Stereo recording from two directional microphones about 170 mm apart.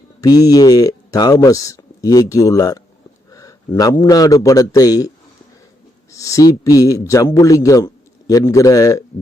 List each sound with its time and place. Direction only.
0.2 s a man's voice: 20° left (ahead or behind)